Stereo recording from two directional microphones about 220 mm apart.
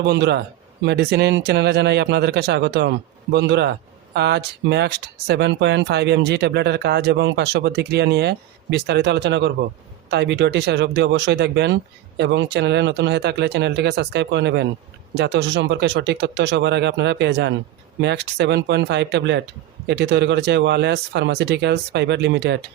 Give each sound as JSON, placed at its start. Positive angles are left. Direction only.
{"t": 0.0, "sound": "speech", "side_deg": -50}